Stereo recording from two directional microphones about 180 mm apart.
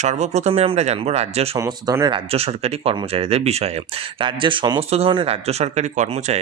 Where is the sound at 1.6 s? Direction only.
20° right (ahead or behind).